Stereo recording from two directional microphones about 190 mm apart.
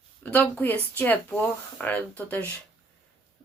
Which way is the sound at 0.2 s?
5° left (ahead or behind).